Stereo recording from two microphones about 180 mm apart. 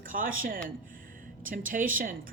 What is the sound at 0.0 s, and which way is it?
Speech, 50° right (ahead or behind).